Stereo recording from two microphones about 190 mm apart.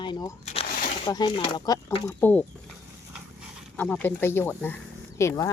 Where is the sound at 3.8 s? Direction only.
5° left (ahead or behind).